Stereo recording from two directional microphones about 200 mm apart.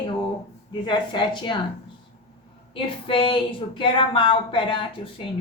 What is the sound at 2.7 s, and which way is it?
Speech, 25° left (ahead or behind).